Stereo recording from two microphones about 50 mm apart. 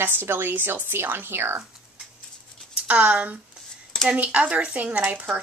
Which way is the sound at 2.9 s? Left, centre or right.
Right.